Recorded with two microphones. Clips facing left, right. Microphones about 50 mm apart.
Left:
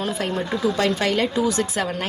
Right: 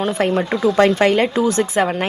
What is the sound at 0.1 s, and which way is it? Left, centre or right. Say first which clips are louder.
A woman's voice: right 6 dB; right.